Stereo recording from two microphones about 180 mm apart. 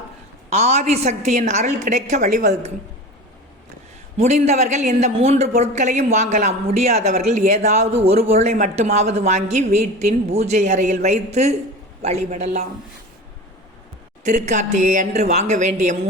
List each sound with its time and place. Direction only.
0.5 s speech: 35° right (ahead or behind)
4.2 s speech: 40° right (ahead or behind)
14.3 s speech: 40° right (ahead or behind)